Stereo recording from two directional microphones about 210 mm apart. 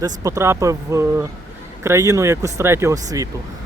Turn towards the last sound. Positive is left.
turn(degrees=-15)  # may be behind; listen again after turning